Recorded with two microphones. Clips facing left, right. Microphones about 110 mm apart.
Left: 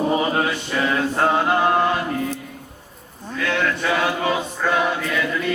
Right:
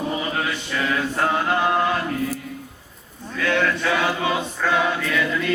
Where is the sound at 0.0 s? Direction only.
30° left (ahead or behind); by 1.9 s 15° left (ahead or behind).